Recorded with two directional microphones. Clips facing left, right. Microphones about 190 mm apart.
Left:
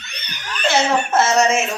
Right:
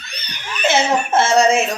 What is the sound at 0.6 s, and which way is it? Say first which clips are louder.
Speech: right 1 dB; 20° right (ahead or behind).